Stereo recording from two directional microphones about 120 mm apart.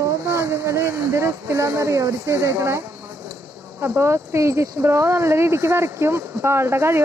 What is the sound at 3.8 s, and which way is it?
Speech, 20° right (ahead or behind).